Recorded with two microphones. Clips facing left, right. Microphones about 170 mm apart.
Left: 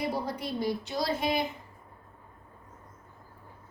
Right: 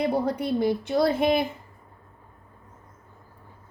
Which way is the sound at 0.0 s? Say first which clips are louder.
Right 7 dB; 55° right (ahead or behind).